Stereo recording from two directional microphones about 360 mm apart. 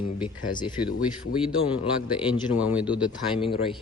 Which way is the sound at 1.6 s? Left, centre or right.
Centre.